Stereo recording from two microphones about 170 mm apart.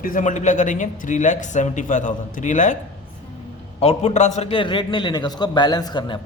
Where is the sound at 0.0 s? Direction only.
50° left (ahead or behind).